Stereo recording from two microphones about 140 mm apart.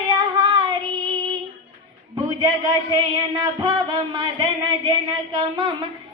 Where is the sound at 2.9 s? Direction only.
30° right (ahead or behind).